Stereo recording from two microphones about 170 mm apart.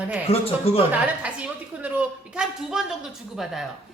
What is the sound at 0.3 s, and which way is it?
Speech, 35° left (ahead or behind).